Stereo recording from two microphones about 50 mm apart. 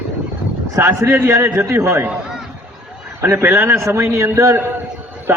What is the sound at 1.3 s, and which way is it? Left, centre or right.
Speech, right.